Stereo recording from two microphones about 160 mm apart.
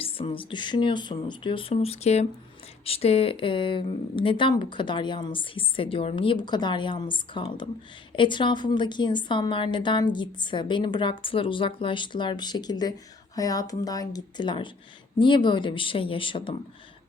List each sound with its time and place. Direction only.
0.0 s a woman's voice: 35° left (ahead or behind)